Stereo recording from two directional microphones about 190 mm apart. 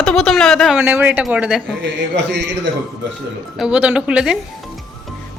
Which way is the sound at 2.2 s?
65° right (ahead or behind).